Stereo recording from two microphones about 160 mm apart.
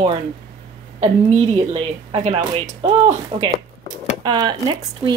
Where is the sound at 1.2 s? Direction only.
45° right (ahead or behind).